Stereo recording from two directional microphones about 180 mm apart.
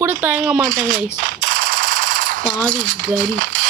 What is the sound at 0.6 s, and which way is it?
Machine gun, 45° right (ahead or behind).